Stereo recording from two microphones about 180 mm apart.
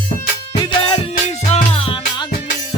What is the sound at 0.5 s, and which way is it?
Music, 25° left (ahead or behind).